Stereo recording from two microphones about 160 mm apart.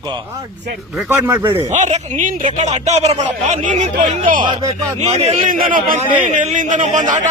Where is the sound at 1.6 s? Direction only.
50° right (ahead or behind).